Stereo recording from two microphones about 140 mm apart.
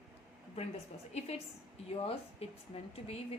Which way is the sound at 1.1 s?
50° left (ahead or behind).